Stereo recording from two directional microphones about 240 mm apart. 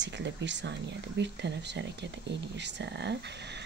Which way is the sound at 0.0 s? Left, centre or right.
Right.